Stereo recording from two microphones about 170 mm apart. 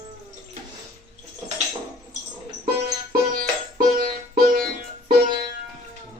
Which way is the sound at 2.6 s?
60° right (ahead or behind).